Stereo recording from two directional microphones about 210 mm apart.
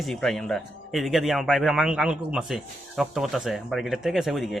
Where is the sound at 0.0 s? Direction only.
Centre (ahead or behind).